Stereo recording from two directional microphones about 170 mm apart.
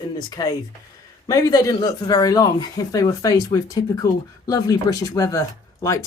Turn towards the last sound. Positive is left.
turn(degrees=15)  # may be behind; listen again after turning